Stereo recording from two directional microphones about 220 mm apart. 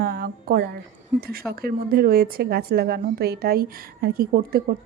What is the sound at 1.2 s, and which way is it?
Speech, 40° right (ahead or behind).